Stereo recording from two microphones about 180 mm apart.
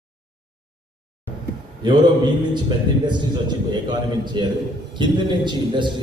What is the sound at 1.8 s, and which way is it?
A man's voice, 25° right (ahead or behind).